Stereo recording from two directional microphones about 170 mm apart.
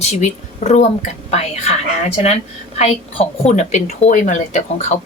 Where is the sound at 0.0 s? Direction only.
40° left (ahead or behind).